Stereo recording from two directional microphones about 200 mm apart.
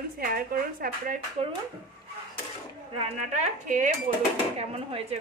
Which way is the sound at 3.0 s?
35° right (ahead or behind).